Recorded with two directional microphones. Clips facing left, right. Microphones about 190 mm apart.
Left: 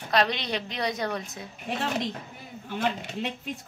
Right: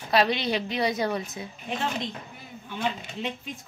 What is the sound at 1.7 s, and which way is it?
Speech, 65° left (ahead or behind).